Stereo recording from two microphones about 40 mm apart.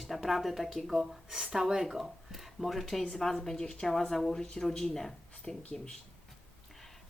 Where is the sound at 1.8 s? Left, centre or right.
Centre.